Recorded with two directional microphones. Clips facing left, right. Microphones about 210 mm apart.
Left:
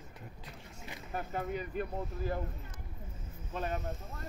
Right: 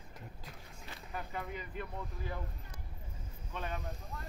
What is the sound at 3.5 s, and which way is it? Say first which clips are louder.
Speech: left 5 dB; 45° left (ahead or behind).